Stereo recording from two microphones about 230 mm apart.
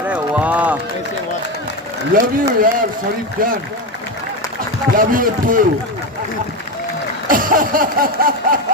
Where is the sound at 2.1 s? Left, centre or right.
Right.